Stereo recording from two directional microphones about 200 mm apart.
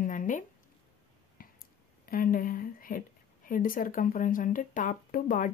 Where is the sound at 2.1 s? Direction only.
45° left (ahead or behind).